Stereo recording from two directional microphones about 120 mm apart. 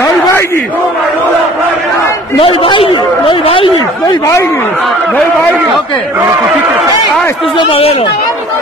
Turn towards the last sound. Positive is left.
turn(degrees=50)  # may be behind; listen again after turning